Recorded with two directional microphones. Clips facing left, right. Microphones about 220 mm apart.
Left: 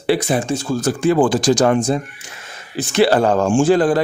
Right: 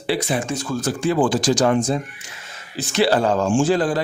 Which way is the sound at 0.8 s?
50° left (ahead or behind).